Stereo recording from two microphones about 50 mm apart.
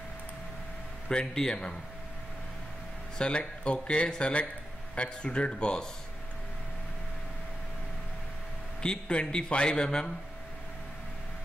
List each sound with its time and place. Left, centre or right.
1.0 s a man's voice: centre
3.2 s speech: centre
8.8 s a man's voice: centre